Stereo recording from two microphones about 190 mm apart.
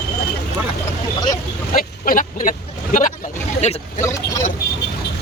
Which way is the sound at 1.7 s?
50° left (ahead or behind).